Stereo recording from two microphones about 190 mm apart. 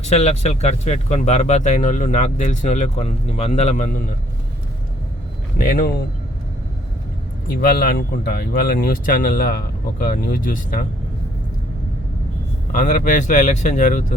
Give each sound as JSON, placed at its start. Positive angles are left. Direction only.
{"t": 0.0, "sound": "speech", "side_deg": 35}
{"t": 5.5, "sound": "speech", "side_deg": 50}
{"t": 7.6, "sound": "speech", "side_deg": 55}
{"t": 12.7, "sound": "speech", "side_deg": 40}